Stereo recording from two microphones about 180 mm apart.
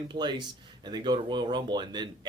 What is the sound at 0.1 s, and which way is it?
Speech, 25° right (ahead or behind).